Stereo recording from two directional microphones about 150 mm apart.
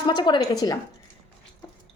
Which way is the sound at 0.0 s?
30° left (ahead or behind).